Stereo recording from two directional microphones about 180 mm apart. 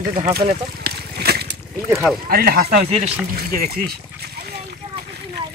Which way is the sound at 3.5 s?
60° right (ahead or behind).